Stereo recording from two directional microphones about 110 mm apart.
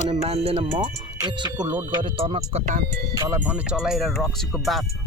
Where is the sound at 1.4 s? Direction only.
40° right (ahead or behind); by 2.7 s 70° right (ahead or behind).